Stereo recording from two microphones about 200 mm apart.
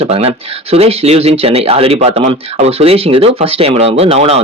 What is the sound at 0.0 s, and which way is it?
Speech, 30° right (ahead or behind).